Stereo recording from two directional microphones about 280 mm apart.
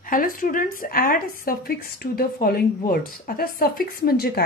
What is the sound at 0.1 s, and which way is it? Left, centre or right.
A woman's voice, left.